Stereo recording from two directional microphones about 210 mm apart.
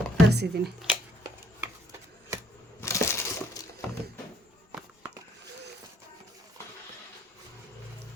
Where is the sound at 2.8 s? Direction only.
15° left (ahead or behind).